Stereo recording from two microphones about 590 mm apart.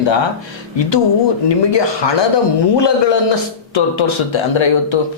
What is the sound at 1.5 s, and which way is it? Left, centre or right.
Speech, left.